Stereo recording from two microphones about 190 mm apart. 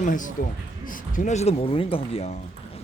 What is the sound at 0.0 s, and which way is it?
A man's voice, 45° left (ahead or behind).